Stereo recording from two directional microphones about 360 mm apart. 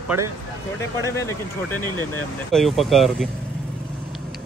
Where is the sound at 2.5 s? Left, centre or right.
Centre.